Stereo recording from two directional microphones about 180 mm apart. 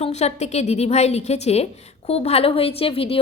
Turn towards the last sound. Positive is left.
turn(degrees=30)  # may be behind; listen again after turning